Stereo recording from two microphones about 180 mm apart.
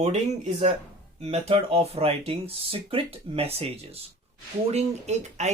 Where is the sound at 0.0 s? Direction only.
40° right (ahead or behind).